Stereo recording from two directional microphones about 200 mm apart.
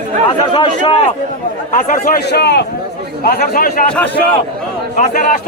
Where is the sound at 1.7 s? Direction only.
40° left (ahead or behind).